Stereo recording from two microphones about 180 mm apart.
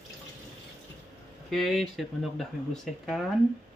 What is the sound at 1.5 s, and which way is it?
Speech, centre (ahead or behind).